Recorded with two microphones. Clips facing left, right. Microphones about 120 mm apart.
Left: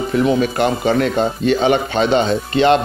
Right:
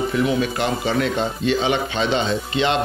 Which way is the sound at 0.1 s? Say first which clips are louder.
Left 5 dB; 45° left (ahead or behind).